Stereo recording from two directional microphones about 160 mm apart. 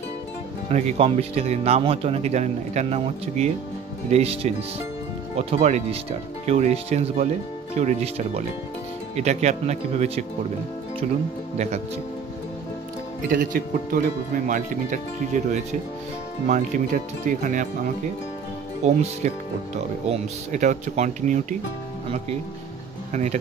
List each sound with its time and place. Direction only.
0.7 s speech: 40° right (ahead or behind)
11.5 s speech: 45° right (ahead or behind)
13.3 s speech: 60° right (ahead or behind)